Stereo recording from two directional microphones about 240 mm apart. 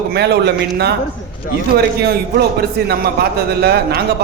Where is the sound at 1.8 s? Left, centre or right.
Right.